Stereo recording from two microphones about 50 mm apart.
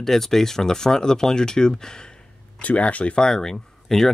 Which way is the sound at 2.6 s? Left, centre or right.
Left.